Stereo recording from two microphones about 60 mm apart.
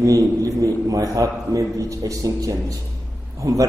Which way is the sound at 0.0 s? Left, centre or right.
Right.